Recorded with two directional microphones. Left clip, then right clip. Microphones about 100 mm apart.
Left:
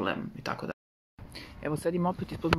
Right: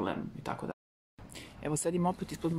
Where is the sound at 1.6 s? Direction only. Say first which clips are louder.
Left 2 dB; 25° right (ahead or behind).